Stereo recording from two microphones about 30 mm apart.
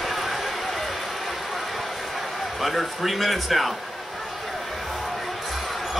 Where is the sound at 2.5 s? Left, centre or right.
Centre.